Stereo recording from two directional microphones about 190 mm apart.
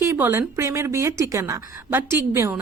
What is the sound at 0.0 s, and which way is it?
Speech, 10° right (ahead or behind).